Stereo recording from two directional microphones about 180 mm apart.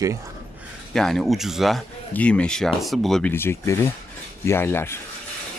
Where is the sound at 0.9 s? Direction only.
Centre (ahead or behind).